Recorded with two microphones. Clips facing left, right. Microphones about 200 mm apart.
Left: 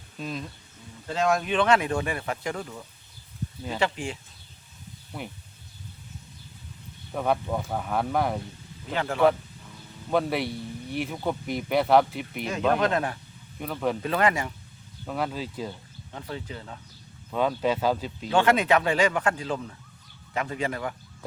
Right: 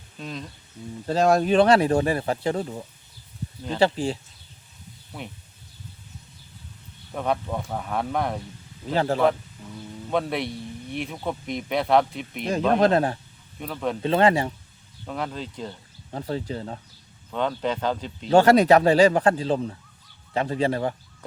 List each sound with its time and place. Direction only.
0.2 s speech: 5° left (ahead or behind)
1.0 s speech: 35° right (ahead or behind)
5.1 s speech: 5° right (ahead or behind)
7.1 s speech: 5° left (ahead or behind)
8.9 s speech: 35° right (ahead or behind)
10.1 s speech: centre (ahead or behind)
12.5 s speech: 35° right (ahead or behind)
13.6 s speech: centre (ahead or behind)
14.0 s speech: 30° right (ahead or behind)
15.0 s speech: 5° left (ahead or behind)
16.1 s speech: 35° right (ahead or behind)
17.3 s speech: 5° left (ahead or behind)
18.3 s speech: 40° right (ahead or behind)